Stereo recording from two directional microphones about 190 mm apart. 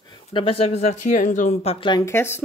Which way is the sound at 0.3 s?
30° left (ahead or behind).